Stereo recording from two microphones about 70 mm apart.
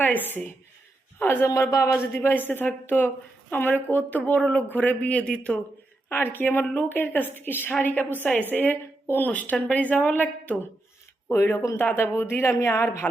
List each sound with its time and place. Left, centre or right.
0.0 s a woman's voice: left
1.5 s speech: left
2.3 s a woman's voice: left; by 5.5 s centre
6.3 s a woman's voice: left
11.3 s speech: left
11.8 s speech: left